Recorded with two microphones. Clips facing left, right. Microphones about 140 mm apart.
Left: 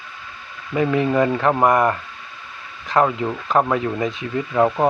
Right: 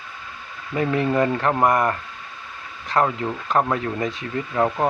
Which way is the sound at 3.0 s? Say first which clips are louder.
Left 2 dB; 5° left (ahead or behind).